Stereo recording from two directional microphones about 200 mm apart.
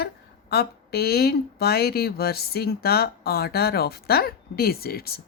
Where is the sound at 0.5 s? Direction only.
50° left (ahead or behind).